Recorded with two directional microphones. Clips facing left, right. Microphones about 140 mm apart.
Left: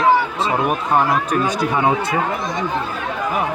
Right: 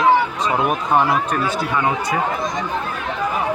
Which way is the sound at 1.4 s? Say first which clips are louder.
Left 2 dB; 20° left (ahead or behind).